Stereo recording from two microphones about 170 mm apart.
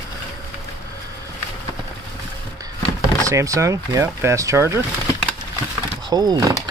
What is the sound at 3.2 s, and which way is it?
Speech, 20° right (ahead or behind).